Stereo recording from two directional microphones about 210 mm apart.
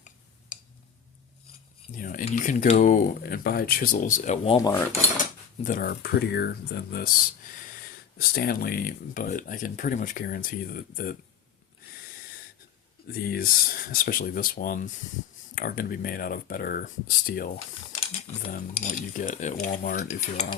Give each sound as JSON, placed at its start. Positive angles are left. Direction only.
{"t": 2.0, "sound": "speech", "side_deg": 40}
{"t": 4.4, "sound": "speech", "side_deg": 20}
{"t": 5.6, "sound": "speech", "side_deg": 40}
{"t": 13.1, "sound": "speech", "side_deg": 45}
{"t": 17.9, "sound": "typing", "side_deg": 25}
{"t": 18.4, "sound": "speech", "side_deg": 35}